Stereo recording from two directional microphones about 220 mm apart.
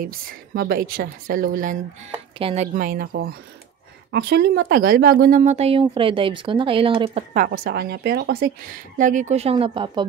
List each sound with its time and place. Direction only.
0.0 s speech: 40° right (ahead or behind)
4.1 s speech: 50° right (ahead or behind); by 7.2 s 25° right (ahead or behind)
7.3 s speech: 40° right (ahead or behind); by 10.0 s 25° right (ahead or behind)